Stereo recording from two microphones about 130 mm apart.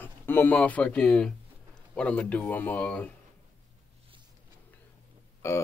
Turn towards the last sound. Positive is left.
turn(degrees=20)  # may be behind; listen again after turning